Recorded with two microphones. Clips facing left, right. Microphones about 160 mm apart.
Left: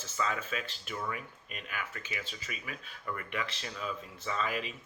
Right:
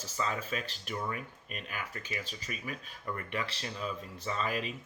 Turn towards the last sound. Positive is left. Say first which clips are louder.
# even
turn(degrees=-35)  # may be behind; listen again after turning